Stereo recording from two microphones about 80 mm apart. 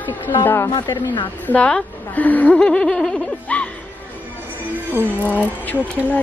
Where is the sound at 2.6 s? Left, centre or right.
Centre.